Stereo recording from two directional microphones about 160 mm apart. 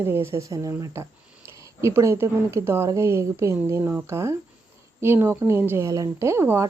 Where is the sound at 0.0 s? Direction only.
15° right (ahead or behind).